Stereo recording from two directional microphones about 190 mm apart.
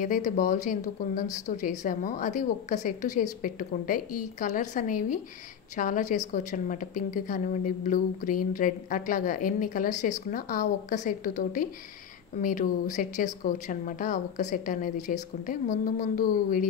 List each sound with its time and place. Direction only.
0.0 s a woman's voice: 45° left (ahead or behind)